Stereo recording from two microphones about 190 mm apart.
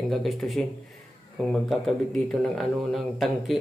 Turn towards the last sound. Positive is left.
turn(degrees=0)  # may be behind; listen again after turning